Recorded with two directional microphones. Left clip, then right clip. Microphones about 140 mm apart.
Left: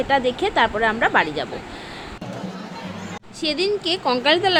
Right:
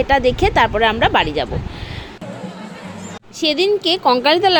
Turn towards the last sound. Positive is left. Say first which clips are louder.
# right 5 dB
turn(degrees=-40)  # may be behind; listen again after turning